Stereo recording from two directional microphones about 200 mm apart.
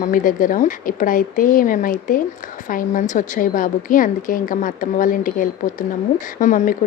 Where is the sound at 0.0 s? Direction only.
40° left (ahead or behind).